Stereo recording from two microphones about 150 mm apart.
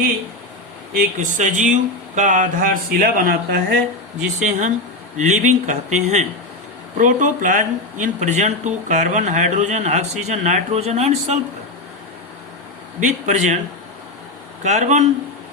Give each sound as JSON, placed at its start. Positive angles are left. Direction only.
{"t": 0.9, "sound": "speech", "side_deg": -60}
{"t": 4.4, "sound": "speech", "side_deg": -55}
{"t": 13.1, "sound": "speech", "side_deg": -50}
{"t": 14.6, "sound": "speech", "side_deg": -50}